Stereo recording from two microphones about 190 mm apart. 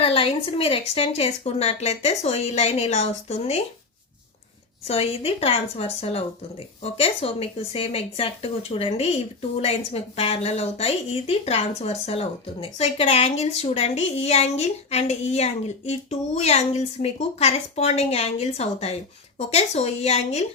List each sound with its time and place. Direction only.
0.0 s speech: 30° left (ahead or behind)
4.9 s speech: 30° left (ahead or behind)